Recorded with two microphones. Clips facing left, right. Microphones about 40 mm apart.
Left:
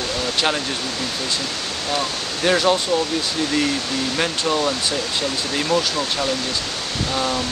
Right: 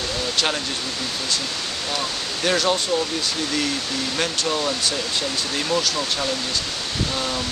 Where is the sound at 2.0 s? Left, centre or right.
Centre.